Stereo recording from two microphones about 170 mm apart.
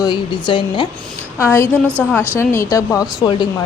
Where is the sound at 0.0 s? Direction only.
25° left (ahead or behind).